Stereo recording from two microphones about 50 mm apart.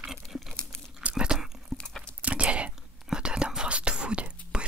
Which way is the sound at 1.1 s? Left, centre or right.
Centre.